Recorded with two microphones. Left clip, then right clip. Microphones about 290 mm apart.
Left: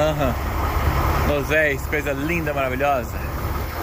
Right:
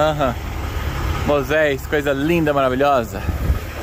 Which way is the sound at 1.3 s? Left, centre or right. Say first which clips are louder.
Right 5 dB; centre.